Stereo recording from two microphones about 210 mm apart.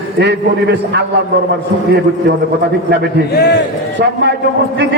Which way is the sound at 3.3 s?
50° left (ahead or behind).